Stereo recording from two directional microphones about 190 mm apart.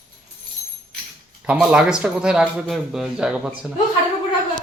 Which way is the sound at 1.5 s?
5° right (ahead or behind).